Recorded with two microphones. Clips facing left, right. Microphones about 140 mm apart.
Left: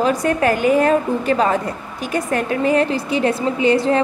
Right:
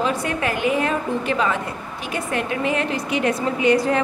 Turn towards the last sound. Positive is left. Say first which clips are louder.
# left 2 dB
turn(degrees=30)  # may be behind; listen again after turning